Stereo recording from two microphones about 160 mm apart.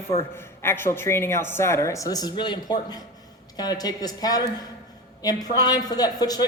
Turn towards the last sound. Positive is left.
turn(degrees=25)  # may be behind; listen again after turning